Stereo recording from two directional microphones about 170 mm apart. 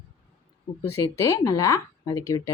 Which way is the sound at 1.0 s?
20° left (ahead or behind).